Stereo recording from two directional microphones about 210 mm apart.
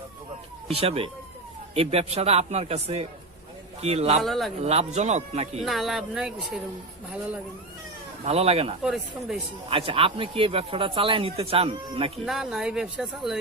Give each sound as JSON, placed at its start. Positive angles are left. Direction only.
{"t": 0.7, "sound": "speech", "side_deg": -30}
{"t": 4.2, "sound": "speech", "side_deg": 0}
{"t": 4.6, "sound": "speech", "side_deg": -30}
{"t": 5.6, "sound": "speech", "side_deg": 0}
{"t": 8.2, "sound": "speech", "side_deg": -30}
{"t": 8.8, "sound": "speech", "side_deg": 0}
{"t": 9.6, "sound": "speech", "side_deg": -25}
{"t": 12.2, "sound": "speech", "side_deg": 0}